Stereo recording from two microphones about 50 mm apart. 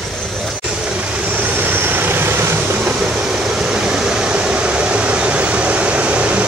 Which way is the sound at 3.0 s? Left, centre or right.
Centre.